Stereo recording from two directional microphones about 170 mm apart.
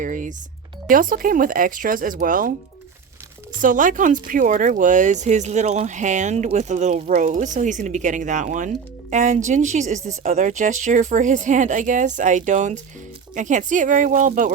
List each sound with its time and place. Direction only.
0.0 s speech: 50° right (ahead or behind)
3.6 s speech: 50° right (ahead or behind)